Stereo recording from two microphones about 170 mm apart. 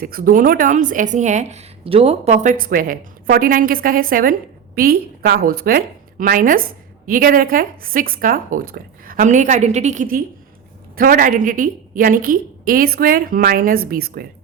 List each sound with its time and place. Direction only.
0.0 s a woman's voice: 55° right (ahead or behind)